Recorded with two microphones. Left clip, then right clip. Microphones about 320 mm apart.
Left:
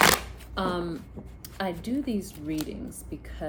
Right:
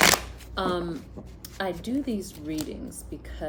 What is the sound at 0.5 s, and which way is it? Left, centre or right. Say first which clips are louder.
Speech: right 1 dB; centre.